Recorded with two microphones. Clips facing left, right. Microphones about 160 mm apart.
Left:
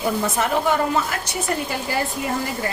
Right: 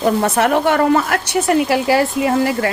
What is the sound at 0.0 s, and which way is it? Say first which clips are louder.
A woman's voice: right 7 dB; 70° right (ahead or behind).